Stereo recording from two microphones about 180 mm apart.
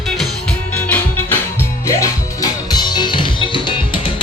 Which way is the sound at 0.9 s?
10° left (ahead or behind).